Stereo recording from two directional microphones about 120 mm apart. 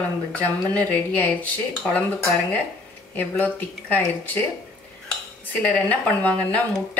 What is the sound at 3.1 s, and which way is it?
Speech, 15° left (ahead or behind).